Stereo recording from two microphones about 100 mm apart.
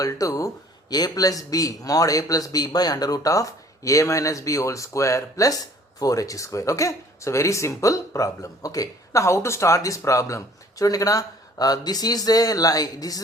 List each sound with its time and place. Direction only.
0.0 s speech: 35° left (ahead or behind)